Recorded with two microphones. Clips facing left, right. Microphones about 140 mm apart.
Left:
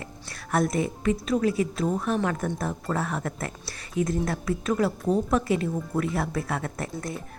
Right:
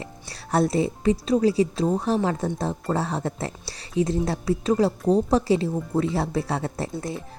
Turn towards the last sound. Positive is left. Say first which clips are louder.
# right 3 dB
turn(degrees=-30)  # may be behind; listen again after turning